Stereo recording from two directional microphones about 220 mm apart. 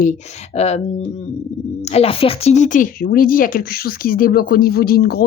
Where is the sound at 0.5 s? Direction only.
30° left (ahead or behind).